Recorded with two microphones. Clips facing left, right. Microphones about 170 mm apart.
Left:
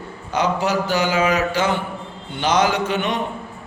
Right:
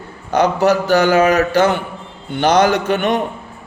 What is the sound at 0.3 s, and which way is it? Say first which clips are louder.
A man's voice: right 6 dB; 65° right (ahead or behind).